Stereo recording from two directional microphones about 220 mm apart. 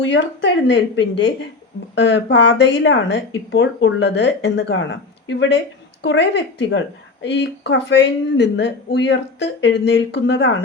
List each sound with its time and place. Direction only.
0.0 s a woman's voice: 55° left (ahead or behind)